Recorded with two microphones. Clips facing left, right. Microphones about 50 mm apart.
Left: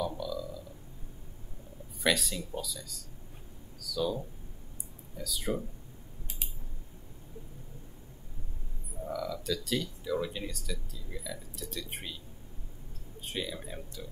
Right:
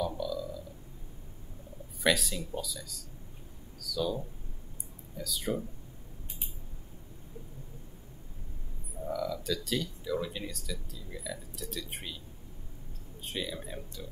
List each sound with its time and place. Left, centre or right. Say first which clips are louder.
0.0 s burping: right 1 dB; centre
2.0 s speech: right 1 dB; centre
9.0 s speech: right 1 dB; centre
13.2 s speech: even; centre